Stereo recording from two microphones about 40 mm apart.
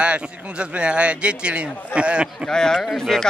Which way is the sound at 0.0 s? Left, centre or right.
Right.